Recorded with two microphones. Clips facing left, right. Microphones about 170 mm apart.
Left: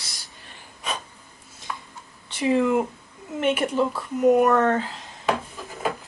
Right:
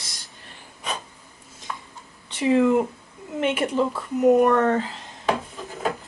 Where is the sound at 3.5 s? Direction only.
10° left (ahead or behind).